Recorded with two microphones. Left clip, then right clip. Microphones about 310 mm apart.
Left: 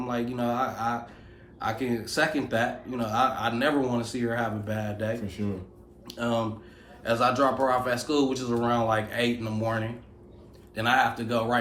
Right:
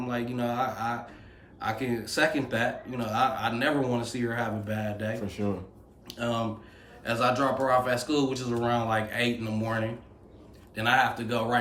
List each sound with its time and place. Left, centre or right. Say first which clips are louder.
0.0 s speech: left 2 dB; centre
5.2 s speech: right 2 dB; centre
6.1 s speech: left 2 dB; centre